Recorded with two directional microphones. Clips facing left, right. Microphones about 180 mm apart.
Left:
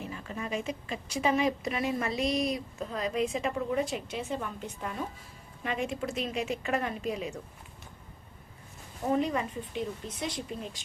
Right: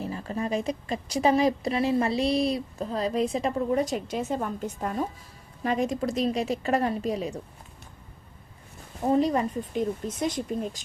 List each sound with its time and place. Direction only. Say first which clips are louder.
0.0 s a woman's voice: right 7 dB; 35° right (ahead or behind)
9.0 s speech: right 5 dB; 35° right (ahead or behind)